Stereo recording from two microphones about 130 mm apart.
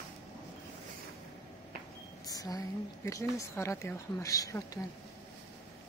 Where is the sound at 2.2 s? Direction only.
30° left (ahead or behind).